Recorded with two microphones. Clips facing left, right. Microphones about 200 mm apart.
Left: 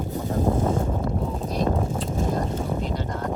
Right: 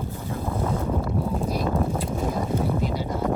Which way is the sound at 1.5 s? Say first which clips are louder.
Left 3 dB; 5° right (ahead or behind).